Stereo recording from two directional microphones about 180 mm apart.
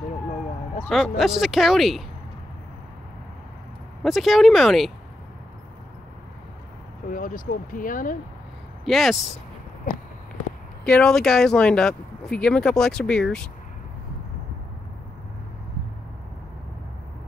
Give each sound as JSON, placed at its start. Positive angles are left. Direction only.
{"t": 0.8, "sound": "speech", "side_deg": 0}
{"t": 4.0, "sound": "speech", "side_deg": 0}
{"t": 7.1, "sound": "speech", "side_deg": 50}
{"t": 8.8, "sound": "speech", "side_deg": 0}
{"t": 10.9, "sound": "speech", "side_deg": 5}